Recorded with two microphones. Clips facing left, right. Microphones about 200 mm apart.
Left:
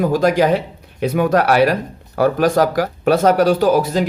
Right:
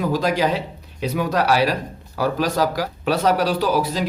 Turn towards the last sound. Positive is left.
turn(degrees=50)  # may be behind; listen again after turning